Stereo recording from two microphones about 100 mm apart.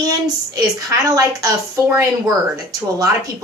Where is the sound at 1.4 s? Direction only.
35° right (ahead or behind).